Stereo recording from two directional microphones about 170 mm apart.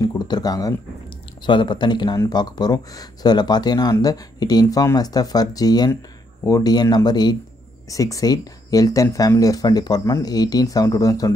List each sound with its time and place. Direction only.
0.0 s speech: 25° left (ahead or behind)